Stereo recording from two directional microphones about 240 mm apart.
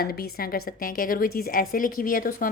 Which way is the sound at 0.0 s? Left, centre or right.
Left.